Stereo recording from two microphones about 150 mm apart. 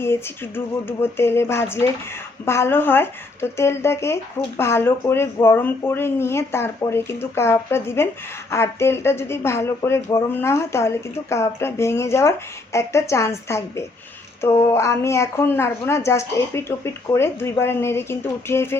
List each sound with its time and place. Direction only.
0.0 s a woman's voice: 15° left (ahead or behind)
14.4 s speech: 20° left (ahead or behind)